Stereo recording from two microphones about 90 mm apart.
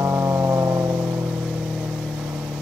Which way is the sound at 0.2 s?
40° right (ahead or behind).